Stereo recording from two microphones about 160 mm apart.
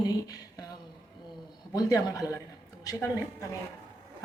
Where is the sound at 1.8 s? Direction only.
20° left (ahead or behind).